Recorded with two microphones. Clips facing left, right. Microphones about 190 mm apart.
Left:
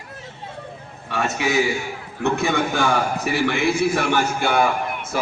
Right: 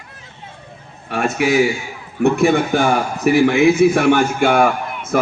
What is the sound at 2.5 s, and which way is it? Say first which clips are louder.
A man's voice: right 5 dB; 50° right (ahead or behind).